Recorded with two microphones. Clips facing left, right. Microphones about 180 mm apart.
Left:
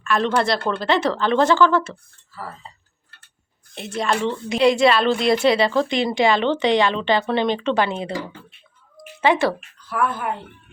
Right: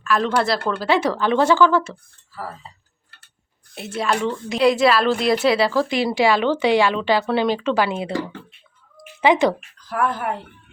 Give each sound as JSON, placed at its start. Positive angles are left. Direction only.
{"t": 0.0, "sound": "a woman's voice", "side_deg": -5}
{"t": 3.8, "sound": "a woman's voice", "side_deg": -5}
{"t": 9.2, "sound": "speech", "side_deg": -15}
{"t": 9.7, "sound": "speech", "side_deg": -35}